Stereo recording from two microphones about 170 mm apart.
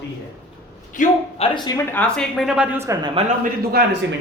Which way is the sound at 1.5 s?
25° left (ahead or behind).